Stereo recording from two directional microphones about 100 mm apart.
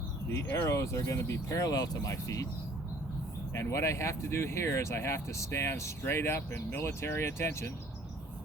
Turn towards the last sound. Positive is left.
turn(degrees=25)  # may be behind; listen again after turning